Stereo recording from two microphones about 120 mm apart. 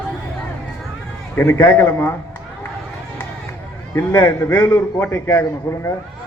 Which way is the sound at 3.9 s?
20° left (ahead or behind).